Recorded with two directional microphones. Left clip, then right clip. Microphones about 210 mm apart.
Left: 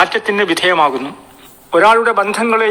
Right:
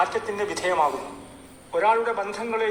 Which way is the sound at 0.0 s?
45° left (ahead or behind).